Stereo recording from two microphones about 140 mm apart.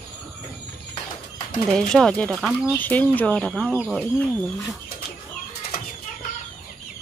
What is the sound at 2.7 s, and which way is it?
Speech, 10° left (ahead or behind).